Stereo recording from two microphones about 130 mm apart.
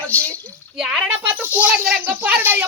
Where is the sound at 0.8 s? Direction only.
10° right (ahead or behind).